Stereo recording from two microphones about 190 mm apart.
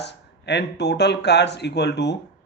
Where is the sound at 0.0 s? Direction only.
65° left (ahead or behind).